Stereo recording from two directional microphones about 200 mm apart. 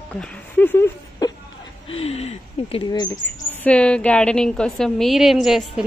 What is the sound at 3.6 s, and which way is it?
A woman's voice, 5° left (ahead or behind).